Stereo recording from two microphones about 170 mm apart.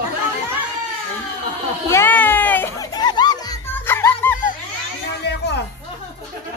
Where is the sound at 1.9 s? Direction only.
15° left (ahead or behind).